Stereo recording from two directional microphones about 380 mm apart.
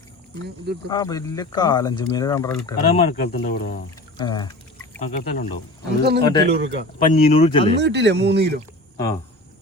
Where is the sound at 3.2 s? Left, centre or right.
Left.